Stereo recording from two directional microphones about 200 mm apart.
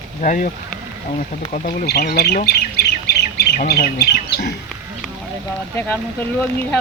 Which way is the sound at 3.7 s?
50° left (ahead or behind).